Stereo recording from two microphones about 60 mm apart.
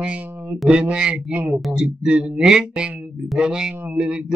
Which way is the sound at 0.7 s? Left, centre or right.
Centre.